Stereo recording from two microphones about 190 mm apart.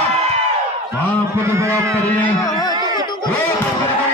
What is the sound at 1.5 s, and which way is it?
Speech, 15° right (ahead or behind).